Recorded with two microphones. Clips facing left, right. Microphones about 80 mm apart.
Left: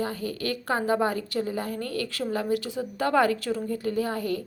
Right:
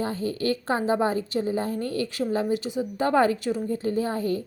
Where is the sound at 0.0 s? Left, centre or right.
Right.